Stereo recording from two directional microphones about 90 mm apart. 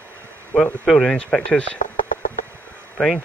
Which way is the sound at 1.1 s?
10° left (ahead or behind).